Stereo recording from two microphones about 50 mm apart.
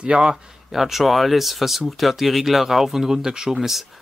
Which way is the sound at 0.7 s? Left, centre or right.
Centre.